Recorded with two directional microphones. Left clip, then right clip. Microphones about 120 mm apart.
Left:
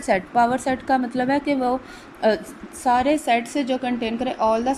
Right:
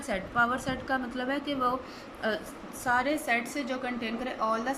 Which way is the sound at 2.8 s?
30° left (ahead or behind).